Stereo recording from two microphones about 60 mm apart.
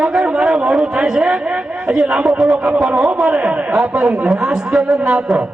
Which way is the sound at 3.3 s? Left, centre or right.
Centre.